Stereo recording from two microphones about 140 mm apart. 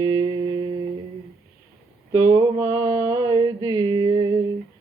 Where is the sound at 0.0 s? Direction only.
35° right (ahead or behind).